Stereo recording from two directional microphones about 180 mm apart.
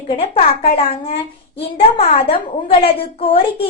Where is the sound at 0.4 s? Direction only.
35° left (ahead or behind).